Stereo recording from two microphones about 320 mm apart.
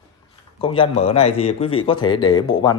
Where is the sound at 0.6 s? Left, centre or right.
Centre.